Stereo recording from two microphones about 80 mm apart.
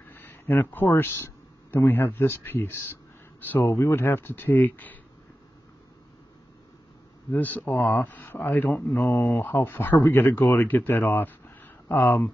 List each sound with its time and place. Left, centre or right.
0.0 s speech: left
3.6 s speech: left
7.2 s speech: left
8.9 s speech: left